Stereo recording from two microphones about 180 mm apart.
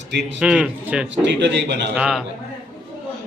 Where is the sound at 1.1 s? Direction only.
85° right.